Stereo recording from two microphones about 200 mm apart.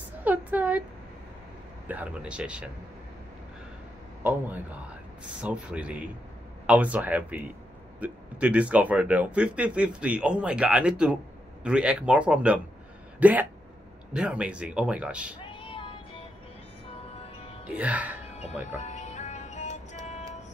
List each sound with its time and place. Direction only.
0.2 s a sound: 10° right (ahead or behind)
1.9 s speech: 5° right (ahead or behind)
4.2 s speech: 10° right (ahead or behind)
15.5 s music: 25° left (ahead or behind)
17.6 s speech: 5° right (ahead or behind)
18.8 s music: 35° left (ahead or behind)